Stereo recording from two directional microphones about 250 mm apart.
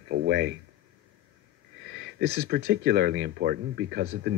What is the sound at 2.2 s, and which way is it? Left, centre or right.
Speech, right.